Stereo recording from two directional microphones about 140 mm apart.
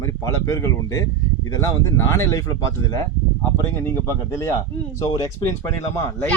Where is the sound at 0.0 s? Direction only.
25° left (ahead or behind).